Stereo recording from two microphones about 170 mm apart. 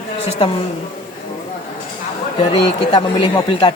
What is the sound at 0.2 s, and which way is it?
Speech, 35° left (ahead or behind).